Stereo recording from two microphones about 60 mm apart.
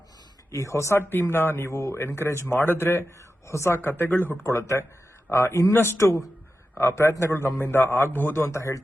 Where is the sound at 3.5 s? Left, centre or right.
Left.